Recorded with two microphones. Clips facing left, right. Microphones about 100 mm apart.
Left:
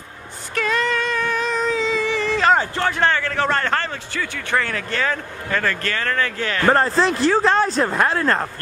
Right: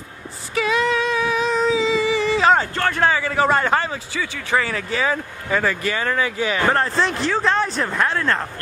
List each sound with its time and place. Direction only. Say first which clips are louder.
0.6 s humming: right 2 dB; centre (ahead or behind)
2.6 s a man's voice: even; 5° left (ahead or behind)
6.7 s speech: left 3 dB; centre (ahead or behind)
7.6 s speech: left 4 dB; 35° left (ahead or behind)
8.0 s speech: even; 5° left (ahead or behind)